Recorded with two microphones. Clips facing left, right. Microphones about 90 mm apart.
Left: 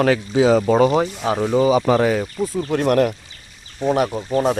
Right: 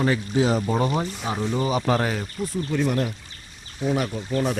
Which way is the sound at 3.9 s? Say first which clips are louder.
Left 6 dB; 50° left (ahead or behind).